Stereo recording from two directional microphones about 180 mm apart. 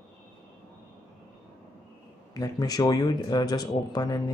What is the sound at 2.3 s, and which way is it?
Speech, 20° left (ahead or behind).